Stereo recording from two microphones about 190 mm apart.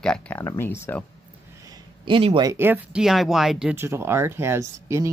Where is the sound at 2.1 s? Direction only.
30° right (ahead or behind).